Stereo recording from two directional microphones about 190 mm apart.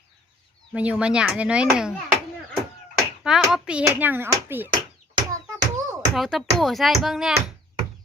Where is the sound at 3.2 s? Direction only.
5° right (ahead or behind).